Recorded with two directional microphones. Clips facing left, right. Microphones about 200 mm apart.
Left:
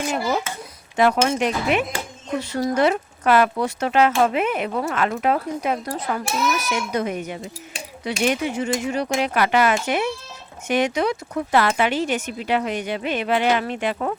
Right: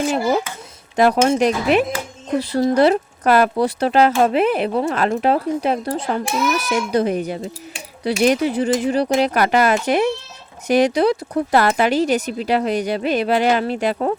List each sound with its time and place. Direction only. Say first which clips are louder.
0.9 s speech: right 4 dB; 40° right (ahead or behind)